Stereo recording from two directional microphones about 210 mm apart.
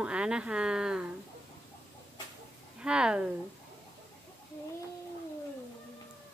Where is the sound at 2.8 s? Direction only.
5° right (ahead or behind).